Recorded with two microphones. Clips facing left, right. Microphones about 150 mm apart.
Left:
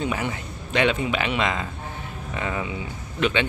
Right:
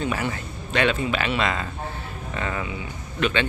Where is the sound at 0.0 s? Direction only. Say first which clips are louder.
Even; 15° left (ahead or behind).